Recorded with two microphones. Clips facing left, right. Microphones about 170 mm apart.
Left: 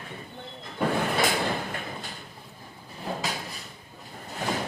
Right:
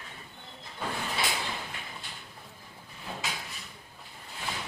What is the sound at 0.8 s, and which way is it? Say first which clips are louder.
Sliding door: left 9 dB; 60° left (ahead or behind).